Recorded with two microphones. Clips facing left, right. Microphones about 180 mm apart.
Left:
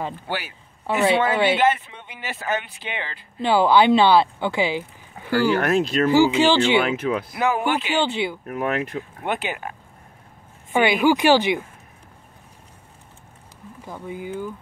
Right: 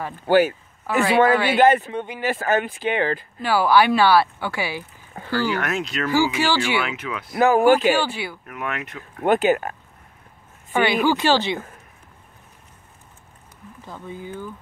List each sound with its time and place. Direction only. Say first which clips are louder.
0.3 s speech: right 13 dB; 45° right (ahead or behind)
0.8 s speech: right 2 dB; 25° left (ahead or behind)
1.6 s speech: right 5 dB; 45° right (ahead or behind)
3.3 s speech: left 2 dB; 20° left (ahead or behind)
5.6 s speech: left 6 dB; 30° left (ahead or behind)
6.0 s speech: left 3 dB; 20° left (ahead or behind)
7.3 s speech: right 11 dB; 45° right (ahead or behind)
8.5 s speech: left 6 dB; 35° left (ahead or behind)
9.2 s speech: right 11 dB; 45° right (ahead or behind)
10.7 s speech: left 2 dB; 15° left (ahead or behind)
13.8 s speech: left 3 dB; 15° left (ahead or behind)